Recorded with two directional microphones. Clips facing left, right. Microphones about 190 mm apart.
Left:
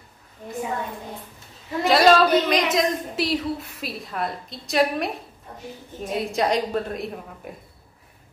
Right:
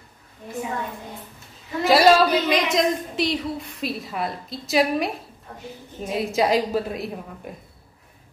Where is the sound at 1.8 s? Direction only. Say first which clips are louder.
Right 1 dB; 5° right (ahead or behind).